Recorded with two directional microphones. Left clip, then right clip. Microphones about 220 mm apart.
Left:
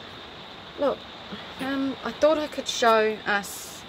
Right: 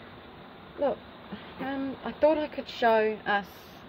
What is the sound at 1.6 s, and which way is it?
Speech, 10° left (ahead or behind).